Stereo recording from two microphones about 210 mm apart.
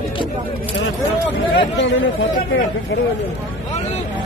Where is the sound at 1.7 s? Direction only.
60° left (ahead or behind).